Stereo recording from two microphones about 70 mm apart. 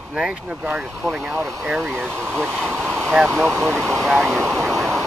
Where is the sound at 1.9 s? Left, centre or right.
Right.